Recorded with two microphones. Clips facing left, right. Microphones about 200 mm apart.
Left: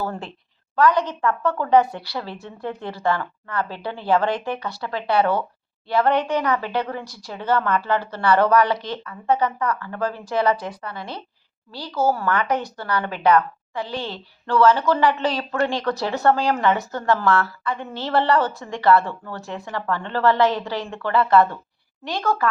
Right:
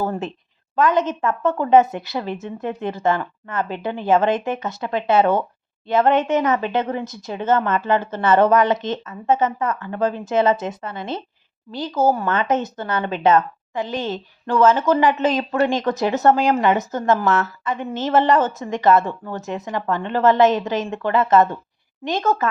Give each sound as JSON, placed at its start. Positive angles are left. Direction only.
{"t": 0.0, "sound": "a woman's voice", "side_deg": -20}